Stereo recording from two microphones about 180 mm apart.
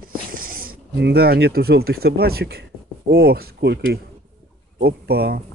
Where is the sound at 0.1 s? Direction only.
50° right (ahead or behind).